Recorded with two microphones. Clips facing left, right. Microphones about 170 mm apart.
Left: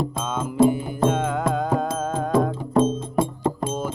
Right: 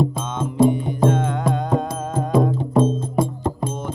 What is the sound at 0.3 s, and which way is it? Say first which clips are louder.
Music: right 1 dB; 5° left (ahead or behind).